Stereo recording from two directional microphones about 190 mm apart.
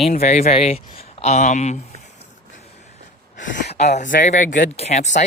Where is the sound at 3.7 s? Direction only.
35° left (ahead or behind).